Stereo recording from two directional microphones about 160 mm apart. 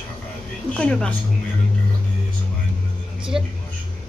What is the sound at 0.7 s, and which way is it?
Speech, 5° left (ahead or behind).